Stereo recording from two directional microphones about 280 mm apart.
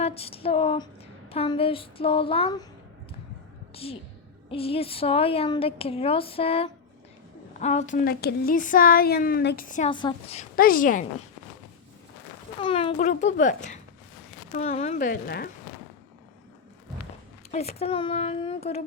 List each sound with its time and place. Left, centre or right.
0.0 s a sound: left
1.3 s a woman's voice: centre
4.5 s a woman's voice: centre
9.9 s a woman's voice: centre
12.5 s a woman's voice: centre
17.5 s a woman's voice: left